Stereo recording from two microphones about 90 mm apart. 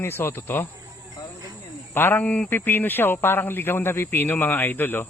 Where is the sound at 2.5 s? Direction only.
20° left (ahead or behind).